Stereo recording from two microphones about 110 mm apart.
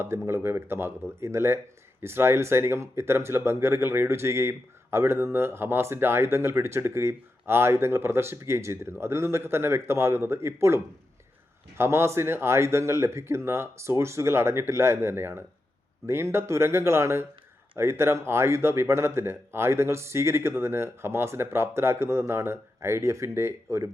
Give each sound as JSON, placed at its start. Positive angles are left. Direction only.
{"t": 0.0, "sound": "speech", "side_deg": -25}
{"t": 11.8, "sound": "speech", "side_deg": -25}